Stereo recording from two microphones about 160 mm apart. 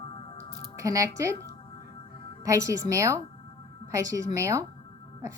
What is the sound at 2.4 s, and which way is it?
Speech, 20° right (ahead or behind).